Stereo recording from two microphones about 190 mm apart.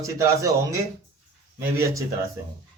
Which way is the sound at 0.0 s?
15° right (ahead or behind).